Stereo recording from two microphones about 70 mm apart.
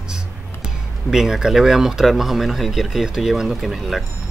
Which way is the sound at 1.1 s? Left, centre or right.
Centre.